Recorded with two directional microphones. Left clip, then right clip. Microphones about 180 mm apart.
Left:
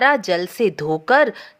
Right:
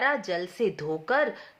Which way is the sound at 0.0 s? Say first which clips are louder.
Left 10 dB; 40° left (ahead or behind).